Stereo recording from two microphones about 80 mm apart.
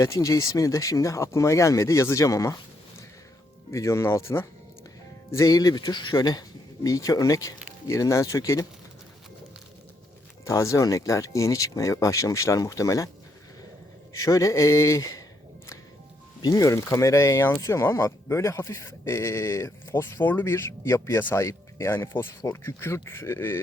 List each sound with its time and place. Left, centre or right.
0.0 s speech: left
3.7 s speech: left
5.3 s speech: left
6.1 s speech: left
6.8 s speech: left
10.4 s speech: left
14.1 s speech: left
16.4 s speech: left